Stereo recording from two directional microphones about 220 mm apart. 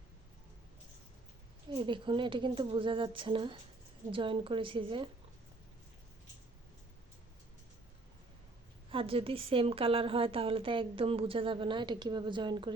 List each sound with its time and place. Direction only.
1.7 s a woman's voice: 20° right (ahead or behind)
8.9 s a woman's voice: 25° right (ahead or behind)